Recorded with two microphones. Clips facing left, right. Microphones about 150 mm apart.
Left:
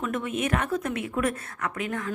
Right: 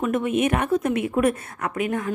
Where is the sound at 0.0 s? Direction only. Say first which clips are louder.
Right 7 dB; 15° right (ahead or behind).